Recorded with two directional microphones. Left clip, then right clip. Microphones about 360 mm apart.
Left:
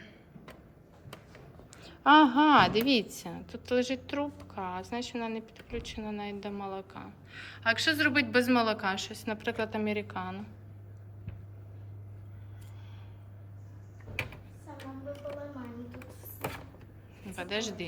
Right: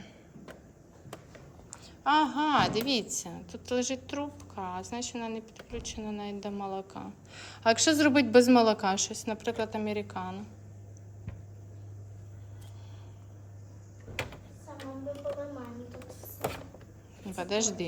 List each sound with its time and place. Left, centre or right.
1.7 s a woman's voice: centre
17.2 s a woman's voice: centre